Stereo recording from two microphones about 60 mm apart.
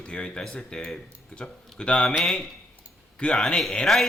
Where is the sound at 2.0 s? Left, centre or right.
Centre.